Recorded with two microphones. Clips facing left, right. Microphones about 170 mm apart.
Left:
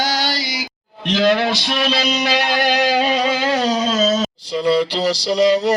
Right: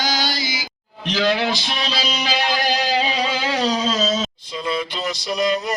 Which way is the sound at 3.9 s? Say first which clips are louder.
Left 4 dB; 45° left (ahead or behind).